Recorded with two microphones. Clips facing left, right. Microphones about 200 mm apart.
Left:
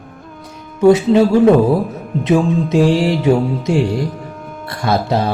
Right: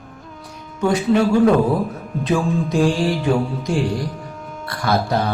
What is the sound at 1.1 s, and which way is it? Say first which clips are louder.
Speech: left 4 dB; 25° left (ahead or behind).